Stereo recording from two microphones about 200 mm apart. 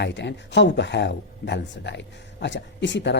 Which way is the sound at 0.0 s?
60° left (ahead or behind).